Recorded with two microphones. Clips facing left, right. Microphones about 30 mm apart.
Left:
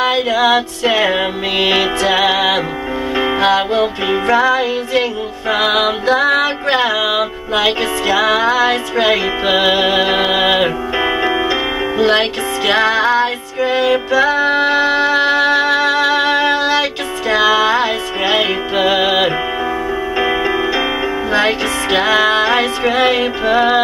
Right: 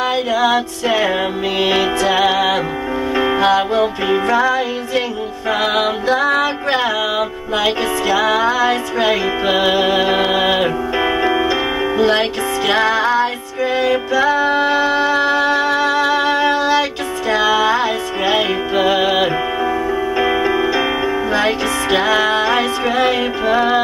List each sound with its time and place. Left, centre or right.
0.0 s music: left
11.0 s music: centre
12.0 s music: left